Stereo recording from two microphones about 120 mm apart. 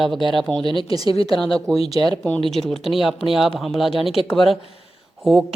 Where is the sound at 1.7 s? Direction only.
55° left (ahead or behind).